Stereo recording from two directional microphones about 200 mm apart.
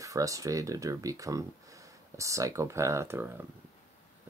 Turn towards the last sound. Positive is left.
turn(degrees=-10)  # may be behind; listen again after turning